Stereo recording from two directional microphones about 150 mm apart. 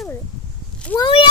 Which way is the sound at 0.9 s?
30° left (ahead or behind).